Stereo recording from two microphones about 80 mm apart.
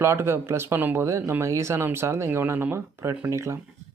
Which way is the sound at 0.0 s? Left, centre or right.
Right.